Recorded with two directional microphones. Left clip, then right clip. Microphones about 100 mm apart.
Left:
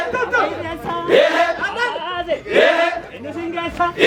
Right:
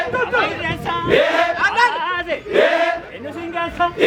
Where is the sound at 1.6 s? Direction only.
30° right (ahead or behind).